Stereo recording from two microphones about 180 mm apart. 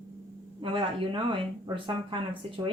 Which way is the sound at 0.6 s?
30° right (ahead or behind).